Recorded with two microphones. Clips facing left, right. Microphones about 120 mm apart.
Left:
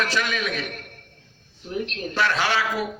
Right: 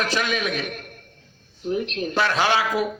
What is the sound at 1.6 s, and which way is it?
A man's voice, 20° right (ahead or behind).